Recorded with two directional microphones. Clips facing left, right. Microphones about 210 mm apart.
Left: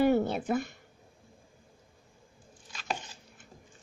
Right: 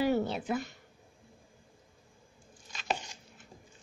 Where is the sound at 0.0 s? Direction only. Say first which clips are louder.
Left 4 dB; 50° left (ahead or behind).